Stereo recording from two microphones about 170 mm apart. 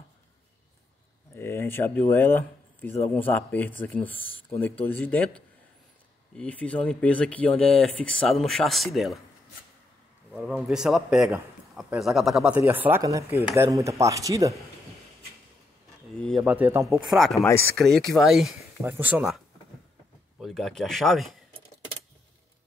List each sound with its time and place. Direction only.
1.3 s speech: 15° left (ahead or behind)
10.5 s speech: centre (ahead or behind); by 14.5 s 20° right (ahead or behind)
16.2 s speech: 5° left (ahead or behind)
16.4 s speech: 10° right (ahead or behind)
17.4 s speech: 15° left (ahead or behind)
17.7 s speech: 5° left (ahead or behind)